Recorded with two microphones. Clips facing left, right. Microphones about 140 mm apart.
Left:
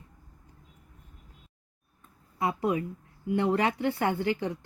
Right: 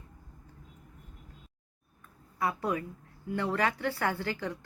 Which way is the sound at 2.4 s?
20° left (ahead or behind).